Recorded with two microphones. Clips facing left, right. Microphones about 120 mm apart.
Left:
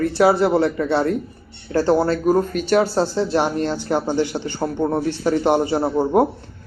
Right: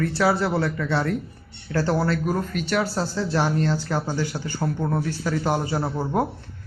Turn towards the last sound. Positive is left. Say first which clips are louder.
# left 7 dB
turn(degrees=25)  # may be behind; listen again after turning